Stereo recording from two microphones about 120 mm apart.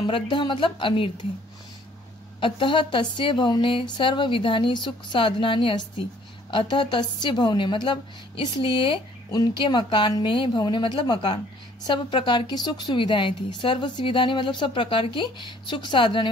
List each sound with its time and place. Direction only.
0.0 s speech: 45° left (ahead or behind)
2.4 s a woman's voice: 45° left (ahead or behind)